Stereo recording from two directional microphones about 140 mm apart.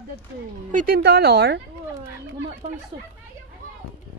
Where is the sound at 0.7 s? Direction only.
65° right (ahead or behind).